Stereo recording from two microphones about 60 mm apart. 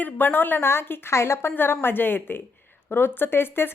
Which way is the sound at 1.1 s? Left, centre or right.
Left.